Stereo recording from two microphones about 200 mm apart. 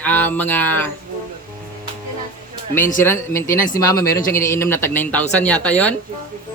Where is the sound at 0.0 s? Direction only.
10° left (ahead or behind).